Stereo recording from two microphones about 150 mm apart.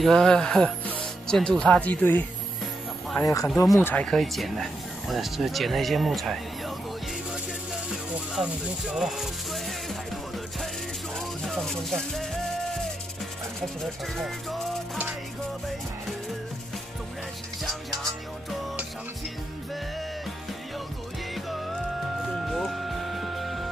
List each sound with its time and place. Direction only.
0.0 s speech: 5° left (ahead or behind)
3.2 s speech: 20° left (ahead or behind)
3.4 s speech: centre (ahead or behind)
7.7 s music: 5° right (ahead or behind)
11.1 s speech: 5° left (ahead or behind)
13.6 s music: centre (ahead or behind)
18.5 s music: centre (ahead or behind)
21.5 s music: centre (ahead or behind)